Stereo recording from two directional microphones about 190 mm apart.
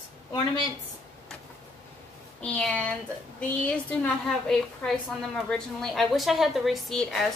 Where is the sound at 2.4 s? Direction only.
5° left (ahead or behind).